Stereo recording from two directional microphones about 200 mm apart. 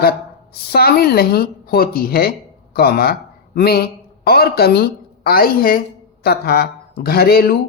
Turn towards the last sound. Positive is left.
turn(degrees=50)  # may be behind; listen again after turning